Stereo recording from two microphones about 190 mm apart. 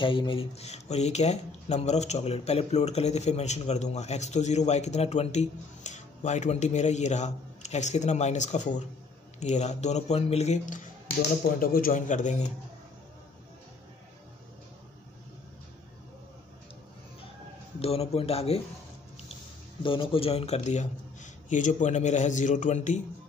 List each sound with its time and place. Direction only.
0.0 s speech: 25° left (ahead or behind)
17.7 s speech: 30° left (ahead or behind)
19.8 s speech: 25° left (ahead or behind)